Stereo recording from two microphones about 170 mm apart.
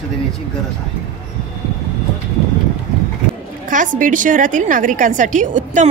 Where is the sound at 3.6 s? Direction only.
50° right (ahead or behind).